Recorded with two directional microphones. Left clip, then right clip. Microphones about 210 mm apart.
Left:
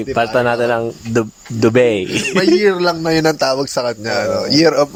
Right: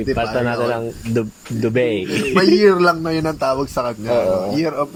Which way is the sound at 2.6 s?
5° left (ahead or behind).